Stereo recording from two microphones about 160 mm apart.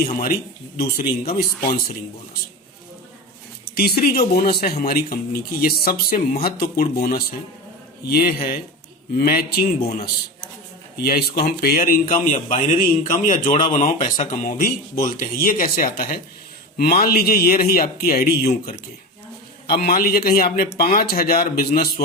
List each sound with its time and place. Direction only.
0.0 s a man's voice: 60° left (ahead or behind)
3.8 s speech: 75° left (ahead or behind)
10.9 s a man's voice: 70° left (ahead or behind)
13.4 s speech: 45° left (ahead or behind)
14.4 s a man's voice: 60° left (ahead or behind)
19.8 s a man's voice: 65° left (ahead or behind)